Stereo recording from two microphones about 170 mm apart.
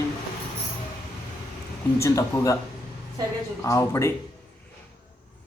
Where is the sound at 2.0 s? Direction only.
20° left (ahead or behind).